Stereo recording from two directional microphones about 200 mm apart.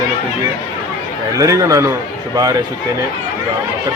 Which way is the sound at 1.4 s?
15° right (ahead or behind).